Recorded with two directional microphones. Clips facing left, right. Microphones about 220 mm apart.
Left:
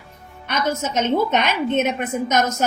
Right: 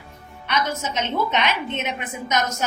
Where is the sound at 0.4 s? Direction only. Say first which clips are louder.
Left 3 dB; 45° left (ahead or behind).